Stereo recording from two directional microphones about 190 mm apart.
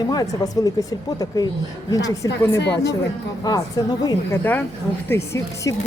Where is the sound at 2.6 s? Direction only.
65° left (ahead or behind).